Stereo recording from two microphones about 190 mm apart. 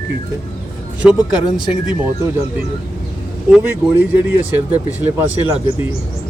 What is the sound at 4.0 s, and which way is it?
Speech, 10° right (ahead or behind).